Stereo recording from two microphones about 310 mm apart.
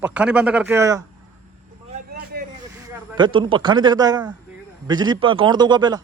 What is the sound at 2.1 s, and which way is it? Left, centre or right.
Vehicle, right.